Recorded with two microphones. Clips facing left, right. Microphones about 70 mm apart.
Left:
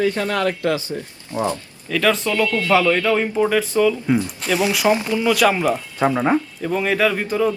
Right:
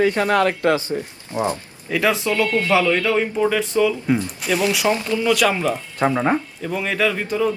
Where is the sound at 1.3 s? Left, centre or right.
Right.